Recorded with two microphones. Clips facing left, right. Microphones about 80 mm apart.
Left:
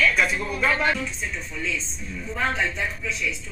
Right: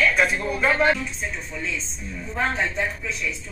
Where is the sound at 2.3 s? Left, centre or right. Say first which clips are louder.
Right 1 dB; right.